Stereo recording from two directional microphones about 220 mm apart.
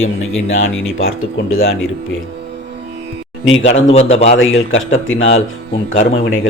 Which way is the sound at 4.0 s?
30° left (ahead or behind).